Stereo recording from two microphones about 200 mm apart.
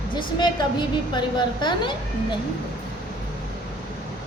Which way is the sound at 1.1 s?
20° left (ahead or behind).